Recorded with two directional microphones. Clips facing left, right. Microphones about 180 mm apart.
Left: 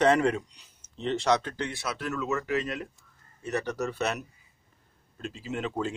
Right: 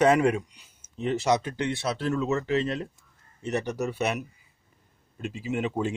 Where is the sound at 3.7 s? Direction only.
10° right (ahead or behind).